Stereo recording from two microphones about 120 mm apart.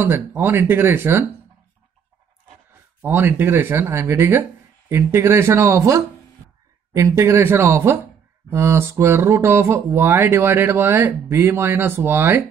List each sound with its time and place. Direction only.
0.0 s speech: 15° right (ahead or behind)
3.0 s speech: 20° right (ahead or behind)